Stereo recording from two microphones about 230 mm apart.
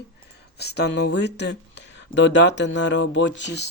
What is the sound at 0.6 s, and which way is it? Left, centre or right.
Speech, left.